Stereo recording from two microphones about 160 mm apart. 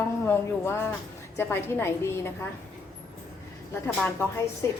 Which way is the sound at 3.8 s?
10° left (ahead or behind).